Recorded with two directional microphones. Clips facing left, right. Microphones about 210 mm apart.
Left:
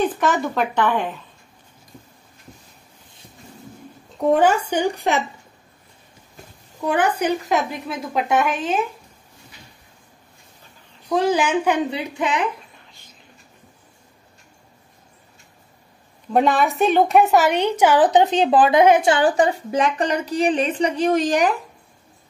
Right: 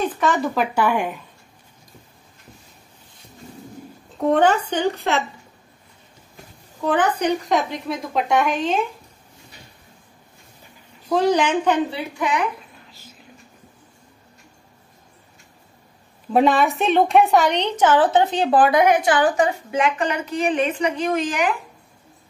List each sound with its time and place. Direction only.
0.0 s speech: centre (ahead or behind)
4.2 s a woman's voice: 5° left (ahead or behind)
6.8 s a woman's voice: 10° left (ahead or behind)
11.1 s a woman's voice: 5° left (ahead or behind); by 12.4 s 20° left (ahead or behind)
16.3 s speech: centre (ahead or behind); by 21.5 s 35° left (ahead or behind)